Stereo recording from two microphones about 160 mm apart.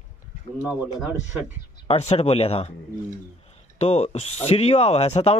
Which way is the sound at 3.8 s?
40° left (ahead or behind).